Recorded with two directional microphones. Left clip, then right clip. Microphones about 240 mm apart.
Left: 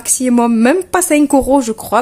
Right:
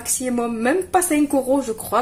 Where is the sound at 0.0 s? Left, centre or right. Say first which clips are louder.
Left 9 dB; left.